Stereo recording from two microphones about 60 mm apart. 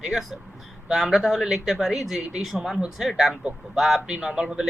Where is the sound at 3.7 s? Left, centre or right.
Centre.